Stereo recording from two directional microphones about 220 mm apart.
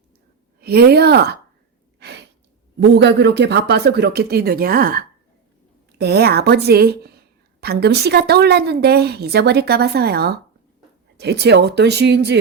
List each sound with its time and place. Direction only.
0.6 s a woman's voice: 45° right (ahead or behind)
2.0 s gasp: 50° right (ahead or behind)
2.9 s a woman's voice: 50° right (ahead or behind)